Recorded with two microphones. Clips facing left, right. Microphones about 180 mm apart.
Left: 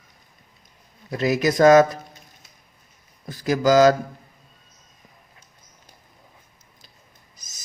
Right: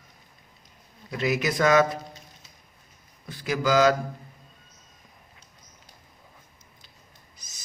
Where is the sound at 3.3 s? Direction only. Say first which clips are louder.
Left 6 dB; 40° left (ahead or behind).